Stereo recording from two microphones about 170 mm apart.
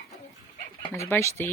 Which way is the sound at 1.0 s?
15° left (ahead or behind).